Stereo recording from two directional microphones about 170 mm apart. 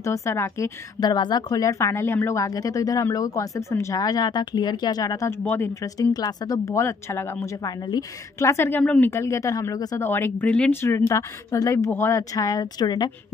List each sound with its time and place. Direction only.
0.0 s a woman's voice: 15° left (ahead or behind)